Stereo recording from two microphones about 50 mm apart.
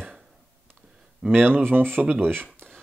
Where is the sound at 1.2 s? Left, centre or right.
Centre.